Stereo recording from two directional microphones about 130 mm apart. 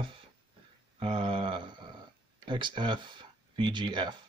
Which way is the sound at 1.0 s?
45° right (ahead or behind).